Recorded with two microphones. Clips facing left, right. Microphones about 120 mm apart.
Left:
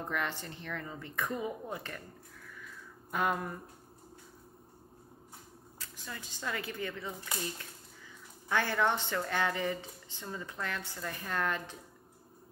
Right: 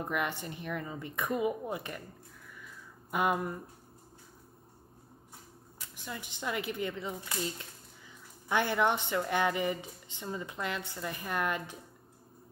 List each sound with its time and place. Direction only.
0.0 s speech: 15° right (ahead or behind)
3.1 s speech: 10° right (ahead or behind)
5.8 s speech: 15° right (ahead or behind)
8.5 s speech: 15° right (ahead or behind)